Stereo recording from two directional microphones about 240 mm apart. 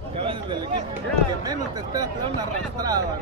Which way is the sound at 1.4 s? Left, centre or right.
Centre.